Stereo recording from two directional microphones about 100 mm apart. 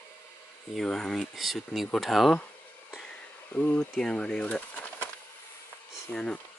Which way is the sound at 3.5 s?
15° left (ahead or behind).